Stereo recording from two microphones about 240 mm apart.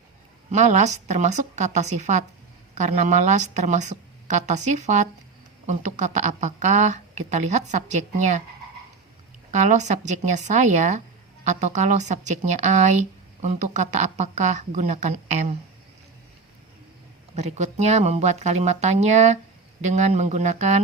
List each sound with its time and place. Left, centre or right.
0.5 s a woman's voice: right
9.5 s a woman's voice: right
17.3 s a woman's voice: right